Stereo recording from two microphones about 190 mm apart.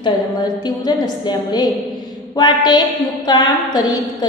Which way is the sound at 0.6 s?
20° left (ahead or behind).